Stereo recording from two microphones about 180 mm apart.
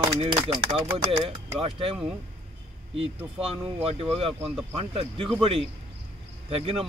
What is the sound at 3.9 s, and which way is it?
Speech, 35° right (ahead or behind).